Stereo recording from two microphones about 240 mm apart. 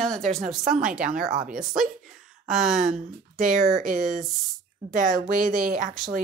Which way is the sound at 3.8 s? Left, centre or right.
Right.